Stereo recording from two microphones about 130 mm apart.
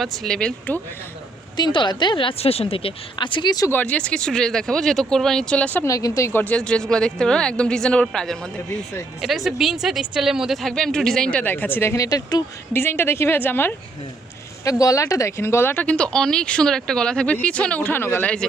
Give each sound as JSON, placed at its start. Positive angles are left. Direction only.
{"t": 0.0, "sound": "speech", "side_deg": 0}
{"t": 1.5, "sound": "speech", "side_deg": 35}
{"t": 3.7, "sound": "speech", "side_deg": 10}
{"t": 5.8, "sound": "speech", "side_deg": 25}
{"t": 12.7, "sound": "speech", "side_deg": 15}
{"t": 14.6, "sound": "speech", "side_deg": 25}